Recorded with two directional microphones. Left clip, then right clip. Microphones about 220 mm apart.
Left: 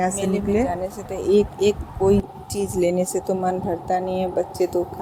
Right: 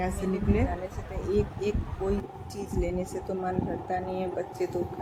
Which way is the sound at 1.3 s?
30° left (ahead or behind).